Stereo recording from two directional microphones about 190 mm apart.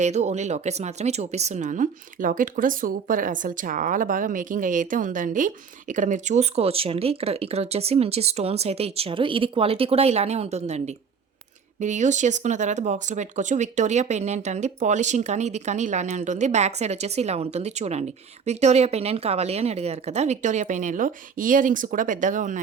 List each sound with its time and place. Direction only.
0.0 s speech: 35° right (ahead or behind)